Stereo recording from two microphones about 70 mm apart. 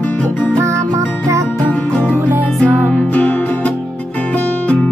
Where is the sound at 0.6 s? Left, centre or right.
Right.